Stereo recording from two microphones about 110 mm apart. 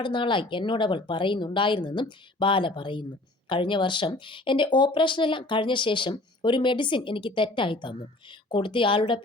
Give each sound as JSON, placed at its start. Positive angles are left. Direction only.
{"t": 0.0, "sound": "speech", "side_deg": 45}